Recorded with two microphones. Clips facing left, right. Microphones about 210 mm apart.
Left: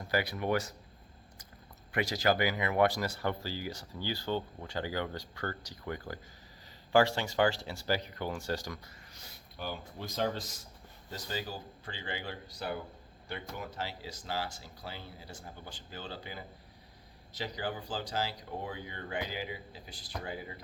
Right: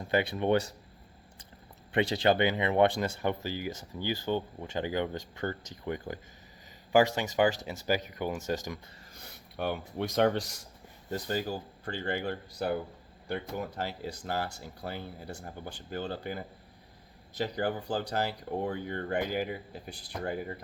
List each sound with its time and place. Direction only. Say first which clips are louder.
0.1 s speech: right 5 dB; 25° right (ahead or behind)
1.9 s speech: right 4 dB; 30° right (ahead or behind)
9.1 s speech: right 9 dB; 60° right (ahead or behind)
11.1 s speech: right 7 dB; 50° right (ahead or behind)